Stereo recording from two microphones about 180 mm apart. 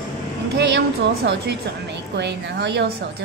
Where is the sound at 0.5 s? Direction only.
80° right.